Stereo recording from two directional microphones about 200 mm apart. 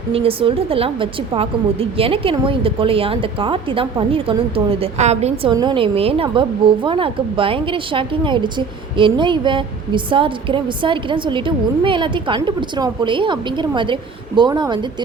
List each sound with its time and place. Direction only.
0.1 s a woman's voice: 30° right (ahead or behind)
5.5 s a woman's voice: 20° right (ahead or behind)